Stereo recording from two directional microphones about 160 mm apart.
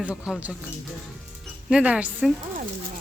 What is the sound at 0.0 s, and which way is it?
Speech, 5° right (ahead or behind).